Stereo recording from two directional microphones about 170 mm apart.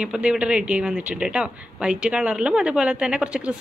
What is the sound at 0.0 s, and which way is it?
Speech, 5° right (ahead or behind).